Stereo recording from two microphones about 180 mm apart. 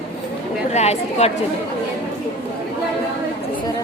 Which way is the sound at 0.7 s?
35° left (ahead or behind).